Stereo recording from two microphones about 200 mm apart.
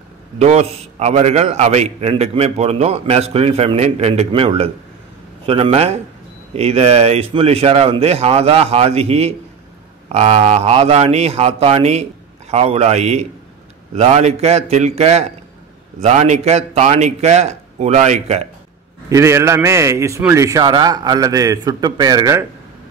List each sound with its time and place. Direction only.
0.4 s a man's voice: 30° right (ahead or behind)
19.0 s a man's voice: 15° right (ahead or behind)